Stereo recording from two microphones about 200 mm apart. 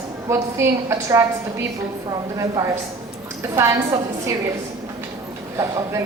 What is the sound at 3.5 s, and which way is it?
Speech, 15° right (ahead or behind).